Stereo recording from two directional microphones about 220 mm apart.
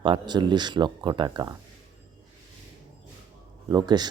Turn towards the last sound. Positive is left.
turn(degrees=-20)  # may be behind; listen again after turning